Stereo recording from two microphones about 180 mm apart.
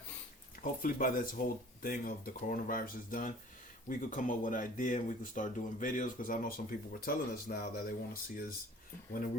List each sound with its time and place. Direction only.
0.6 s speech: 50° left (ahead or behind)